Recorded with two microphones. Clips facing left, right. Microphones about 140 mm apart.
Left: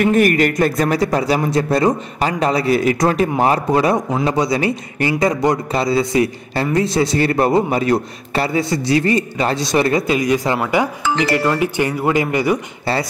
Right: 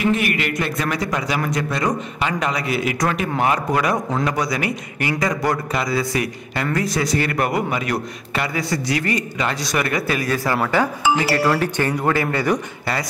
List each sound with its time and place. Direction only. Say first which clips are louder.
0.0 s a man's voice: left 7 dB; 45° left (ahead or behind); by 12.5 s 15° left (ahead or behind)